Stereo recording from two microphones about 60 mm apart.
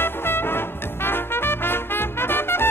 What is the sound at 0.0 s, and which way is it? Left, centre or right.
Music, left.